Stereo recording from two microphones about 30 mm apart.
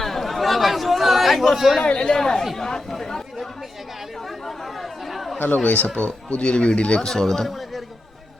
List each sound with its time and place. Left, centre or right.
0.0 s chatter: centre
1.5 s speech: centre
1.8 s speech: left
4.4 s chatter: centre
5.6 s speech: left
6.0 s speech: left
7.0 s speech: centre